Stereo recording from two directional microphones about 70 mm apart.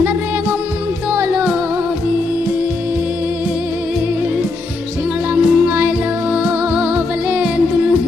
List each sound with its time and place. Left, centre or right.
1.1 s music: right
5.3 s music: right
5.9 s music: centre